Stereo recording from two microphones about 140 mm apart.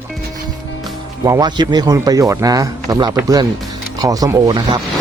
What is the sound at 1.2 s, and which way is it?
Speech, 30° right (ahead or behind).